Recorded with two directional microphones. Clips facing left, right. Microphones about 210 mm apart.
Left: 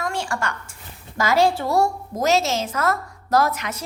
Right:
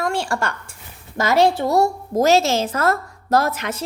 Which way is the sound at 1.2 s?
20° right (ahead or behind).